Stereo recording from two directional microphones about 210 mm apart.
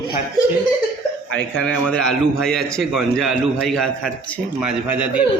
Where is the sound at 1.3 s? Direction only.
5° left (ahead or behind).